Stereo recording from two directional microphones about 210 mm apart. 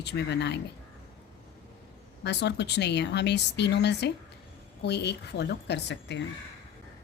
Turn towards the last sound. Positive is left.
turn(degrees=55)  # may be behind; listen again after turning